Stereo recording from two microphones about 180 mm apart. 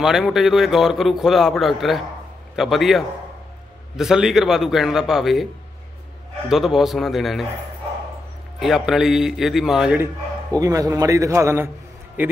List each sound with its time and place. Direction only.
0.0 s a man's voice: centre (ahead or behind)
6.5 s a man's voice: centre (ahead or behind)
8.5 s a man's voice: centre (ahead or behind)
10.6 s a man's voice: 20° right (ahead or behind)